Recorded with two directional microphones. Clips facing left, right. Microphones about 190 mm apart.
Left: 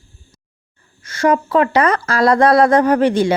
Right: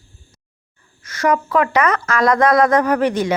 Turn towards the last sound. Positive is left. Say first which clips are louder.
# left 3 dB
turn(degrees=30)  # may be behind; listen again after turning